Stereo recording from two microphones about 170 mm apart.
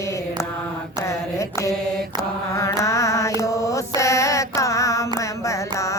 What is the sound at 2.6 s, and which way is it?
Mantra, 15° left (ahead or behind).